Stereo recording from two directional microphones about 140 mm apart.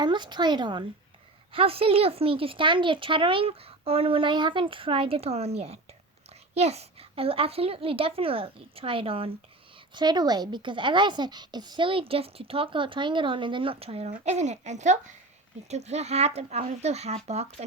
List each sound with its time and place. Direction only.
0.0 s speech: 35° right (ahead or behind)
1.5 s speech: 40° right (ahead or behind)
14.1 s speech: 55° right (ahead or behind)